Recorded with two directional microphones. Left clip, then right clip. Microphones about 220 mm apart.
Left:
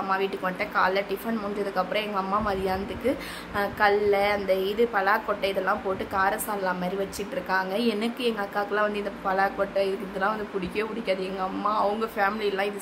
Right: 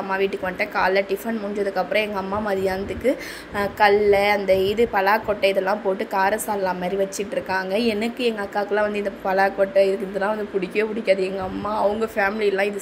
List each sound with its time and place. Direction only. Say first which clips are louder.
0.1 s a woman's voice: right 5 dB; 15° right (ahead or behind)